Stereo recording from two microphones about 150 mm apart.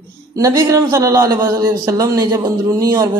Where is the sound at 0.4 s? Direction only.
20° right (ahead or behind).